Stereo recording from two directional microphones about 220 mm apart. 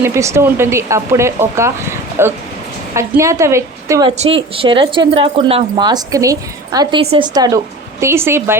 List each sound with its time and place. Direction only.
0.0 s speech: 15° right (ahead or behind)
4.2 s speech: 25° right (ahead or behind)